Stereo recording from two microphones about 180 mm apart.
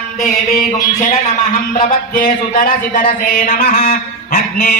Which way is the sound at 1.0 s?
45° left (ahead or behind).